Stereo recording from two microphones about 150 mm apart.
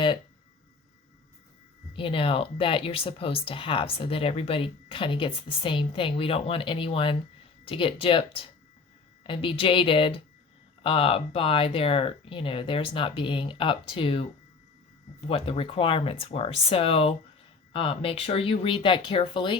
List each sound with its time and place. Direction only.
1.9 s speech: 35° left (ahead or behind)
15.3 s speech: 40° left (ahead or behind)